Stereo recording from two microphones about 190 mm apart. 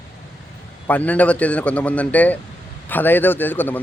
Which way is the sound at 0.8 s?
10° left (ahead or behind).